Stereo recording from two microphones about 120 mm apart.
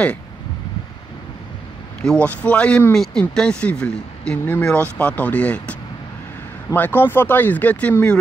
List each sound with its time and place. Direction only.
2.0 s speech: 10° left (ahead or behind)